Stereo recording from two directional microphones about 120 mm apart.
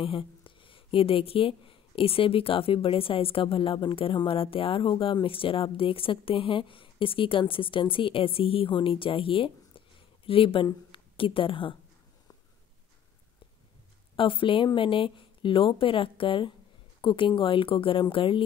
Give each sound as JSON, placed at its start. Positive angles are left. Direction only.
{"t": 0.0, "sound": "speech", "side_deg": 45}
{"t": 14.1, "sound": "speech", "side_deg": 45}